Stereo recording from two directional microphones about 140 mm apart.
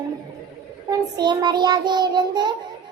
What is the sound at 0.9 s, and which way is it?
A child's voice, 30° right (ahead or behind).